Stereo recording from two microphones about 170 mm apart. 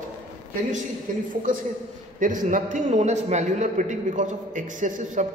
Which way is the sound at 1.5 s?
50° right (ahead or behind).